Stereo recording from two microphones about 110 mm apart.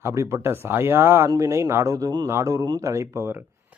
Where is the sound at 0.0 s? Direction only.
25° right (ahead or behind).